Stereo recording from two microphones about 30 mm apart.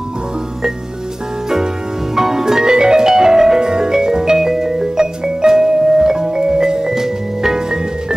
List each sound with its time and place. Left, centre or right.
2.1 s music: centre
6.9 s music: centre